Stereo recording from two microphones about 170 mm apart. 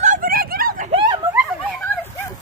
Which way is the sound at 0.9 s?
30° right (ahead or behind).